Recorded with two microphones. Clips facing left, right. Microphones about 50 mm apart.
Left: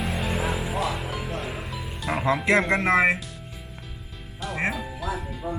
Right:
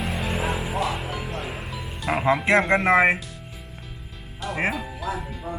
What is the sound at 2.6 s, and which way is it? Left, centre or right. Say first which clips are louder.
Speech: right 2 dB; right.